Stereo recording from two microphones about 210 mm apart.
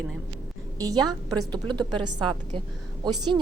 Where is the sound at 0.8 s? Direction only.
15° right (ahead or behind).